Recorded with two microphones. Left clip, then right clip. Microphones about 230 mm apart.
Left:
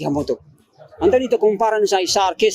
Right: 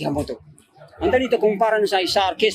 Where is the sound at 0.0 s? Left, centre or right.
Left.